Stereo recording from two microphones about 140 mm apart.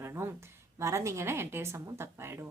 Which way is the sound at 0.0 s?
20° right (ahead or behind).